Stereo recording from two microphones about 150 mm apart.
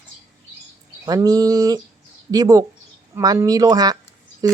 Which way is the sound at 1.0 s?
25° right (ahead or behind).